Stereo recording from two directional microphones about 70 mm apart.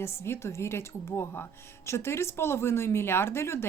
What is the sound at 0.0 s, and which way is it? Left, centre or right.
Speech, left.